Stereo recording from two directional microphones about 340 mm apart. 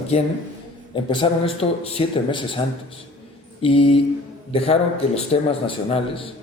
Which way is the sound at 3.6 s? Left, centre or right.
Centre.